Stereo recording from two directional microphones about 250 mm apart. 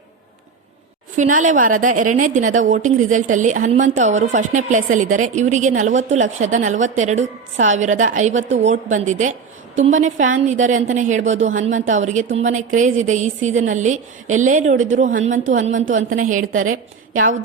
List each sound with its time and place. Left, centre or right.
1.1 s a woman's voice: right
16.5 s a woman's voice: right
16.7 s a woman's voice: right